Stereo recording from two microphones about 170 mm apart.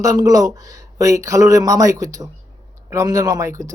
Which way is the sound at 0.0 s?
20° right (ahead or behind).